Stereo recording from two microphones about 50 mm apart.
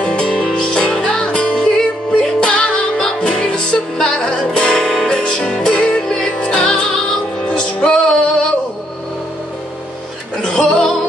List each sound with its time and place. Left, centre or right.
0.0 s music: centre
10.4 s music: centre